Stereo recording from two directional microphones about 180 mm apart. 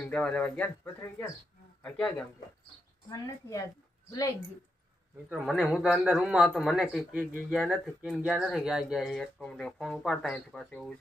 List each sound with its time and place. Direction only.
0.0 s speech: 5° left (ahead or behind)
3.4 s speech: 15° left (ahead or behind)
5.3 s speech: 5° right (ahead or behind)